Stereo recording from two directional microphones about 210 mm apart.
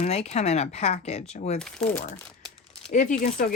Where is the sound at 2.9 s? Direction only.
35° left (ahead or behind).